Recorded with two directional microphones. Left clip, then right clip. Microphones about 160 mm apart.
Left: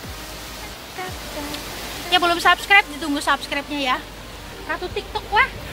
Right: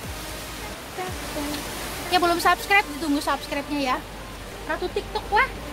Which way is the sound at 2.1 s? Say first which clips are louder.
Left 4 dB; 5° left (ahead or behind).